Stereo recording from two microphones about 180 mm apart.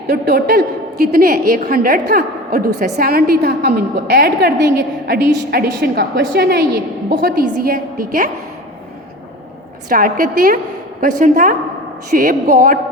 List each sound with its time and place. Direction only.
0.1 s a woman's voice: 60° right (ahead or behind)
9.9 s a woman's voice: 50° right (ahead or behind)